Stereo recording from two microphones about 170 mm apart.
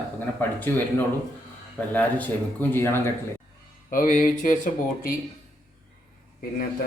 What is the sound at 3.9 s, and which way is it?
Speech, 55° left (ahead or behind).